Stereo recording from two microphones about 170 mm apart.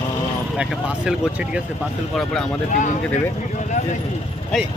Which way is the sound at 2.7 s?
45° left (ahead or behind).